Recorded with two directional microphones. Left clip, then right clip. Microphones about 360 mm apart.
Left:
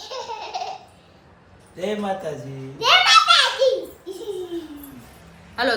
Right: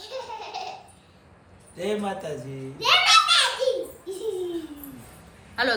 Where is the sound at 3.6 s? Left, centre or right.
Left.